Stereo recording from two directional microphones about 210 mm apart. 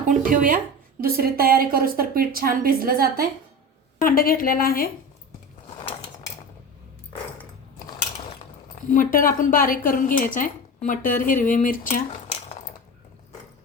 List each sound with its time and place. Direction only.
0.1 s a woman's voice: 40° right (ahead or behind)
3.9 s a woman's voice: 40° left (ahead or behind)
8.9 s a woman's voice: 40° left (ahead or behind)